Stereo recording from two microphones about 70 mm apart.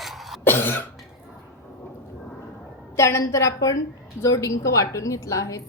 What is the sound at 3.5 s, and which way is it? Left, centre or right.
A woman's voice, left.